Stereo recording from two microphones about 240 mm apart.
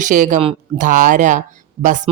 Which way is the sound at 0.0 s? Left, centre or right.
Right.